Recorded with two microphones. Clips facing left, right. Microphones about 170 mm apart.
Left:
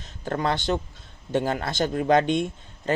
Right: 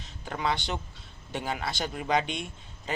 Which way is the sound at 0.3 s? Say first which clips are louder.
Left 6 dB; 50° left (ahead or behind).